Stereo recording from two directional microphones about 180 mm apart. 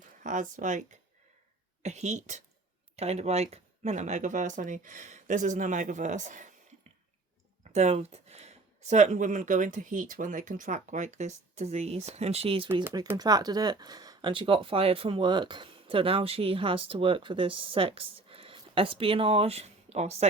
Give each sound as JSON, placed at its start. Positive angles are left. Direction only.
{"t": 0.2, "sound": "speech", "side_deg": -45}
{"t": 7.7, "sound": "speech", "side_deg": -40}
{"t": 12.8, "sound": "speech", "side_deg": -15}